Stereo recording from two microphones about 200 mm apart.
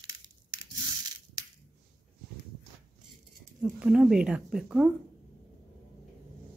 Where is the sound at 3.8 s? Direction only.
5° right (ahead or behind).